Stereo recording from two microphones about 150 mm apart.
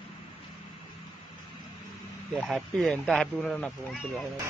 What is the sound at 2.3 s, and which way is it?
Speech, centre (ahead or behind).